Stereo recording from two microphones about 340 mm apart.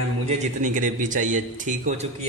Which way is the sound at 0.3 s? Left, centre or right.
Right.